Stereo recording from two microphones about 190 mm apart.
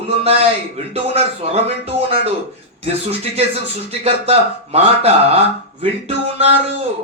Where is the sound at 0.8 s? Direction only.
30° right (ahead or behind).